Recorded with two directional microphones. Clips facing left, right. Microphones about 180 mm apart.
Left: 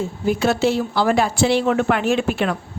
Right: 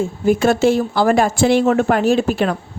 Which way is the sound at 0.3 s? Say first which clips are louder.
Right 4 dB; 50° right (ahead or behind).